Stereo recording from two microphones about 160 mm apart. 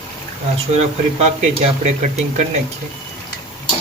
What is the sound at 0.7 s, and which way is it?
Speech, 45° right (ahead or behind).